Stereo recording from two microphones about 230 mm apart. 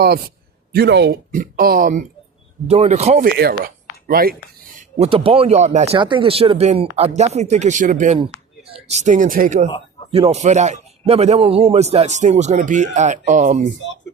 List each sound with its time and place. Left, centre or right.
0.7 s a man's voice: right
3.2 s a man's voice: right